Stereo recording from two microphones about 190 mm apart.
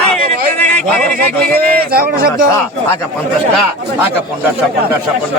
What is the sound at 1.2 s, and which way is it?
Speech, 50° right (ahead or behind).